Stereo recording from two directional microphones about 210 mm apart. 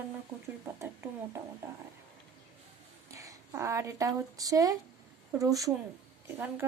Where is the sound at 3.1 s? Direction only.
15° right (ahead or behind).